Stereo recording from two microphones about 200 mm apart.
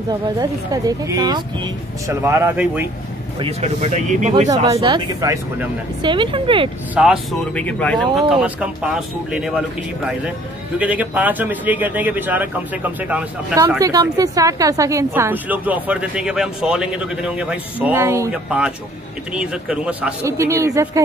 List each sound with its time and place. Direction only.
0.4 s a man's voice: 20° right (ahead or behind)
3.3 s speech: 30° right (ahead or behind)
4.6 s speech: 20° right (ahead or behind)
7.0 s a man's voice: centre (ahead or behind); by 21.0 s 15° right (ahead or behind)